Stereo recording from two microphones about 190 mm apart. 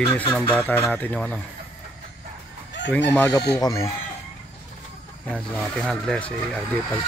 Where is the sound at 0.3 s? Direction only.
10° left (ahead or behind).